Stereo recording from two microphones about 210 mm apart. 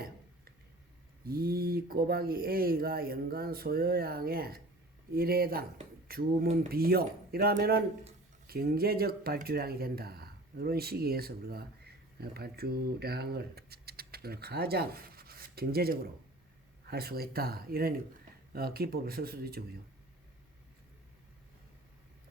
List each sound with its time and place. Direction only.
1.3 s speech: 45° right (ahead or behind)